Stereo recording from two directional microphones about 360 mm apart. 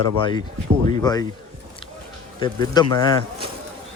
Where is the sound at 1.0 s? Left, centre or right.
Centre.